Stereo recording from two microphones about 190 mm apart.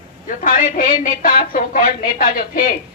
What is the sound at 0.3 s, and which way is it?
Speech, 45° left (ahead or behind).